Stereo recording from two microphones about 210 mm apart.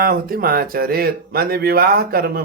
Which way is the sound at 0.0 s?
45° right (ahead or behind).